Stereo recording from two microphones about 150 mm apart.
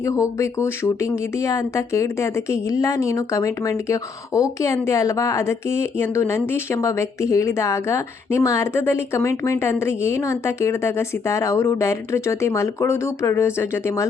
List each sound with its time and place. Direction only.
0.0 s speech: 20° left (ahead or behind)